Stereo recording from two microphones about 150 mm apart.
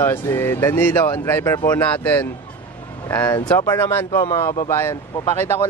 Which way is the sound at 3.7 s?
15° left (ahead or behind).